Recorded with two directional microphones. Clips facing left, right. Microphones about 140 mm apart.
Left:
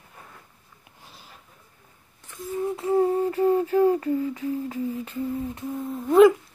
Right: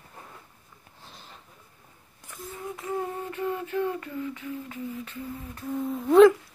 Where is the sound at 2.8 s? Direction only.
30° left (ahead or behind).